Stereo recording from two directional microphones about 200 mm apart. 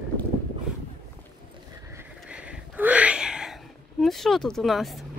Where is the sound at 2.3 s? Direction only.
5° right (ahead or behind).